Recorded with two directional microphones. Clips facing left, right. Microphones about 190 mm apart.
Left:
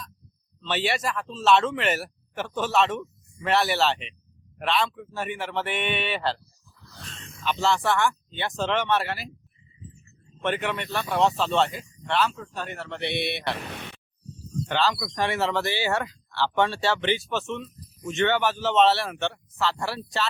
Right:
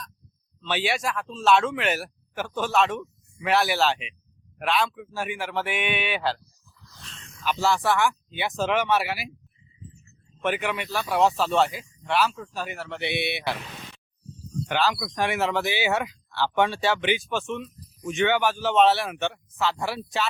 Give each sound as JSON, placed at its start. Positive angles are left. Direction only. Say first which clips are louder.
{"t": 0.6, "sound": "speech", "louder": "even", "side_deg": 0}
{"t": 7.6, "sound": "speech", "louder": "right 1 dB", "side_deg": 0}
{"t": 10.4, "sound": "speech", "louder": "even", "side_deg": -5}
{"t": 13.7, "sound": "a sound", "louder": "left 4 dB", "side_deg": 65}
{"t": 14.7, "sound": "speech", "louder": "even", "side_deg": -10}